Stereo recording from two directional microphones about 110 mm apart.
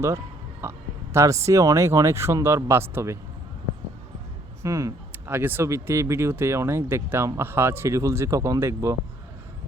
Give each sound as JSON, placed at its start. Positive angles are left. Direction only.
{"t": 0.6, "sound": "a man's voice", "side_deg": -25}
{"t": 4.6, "sound": "speech", "side_deg": -30}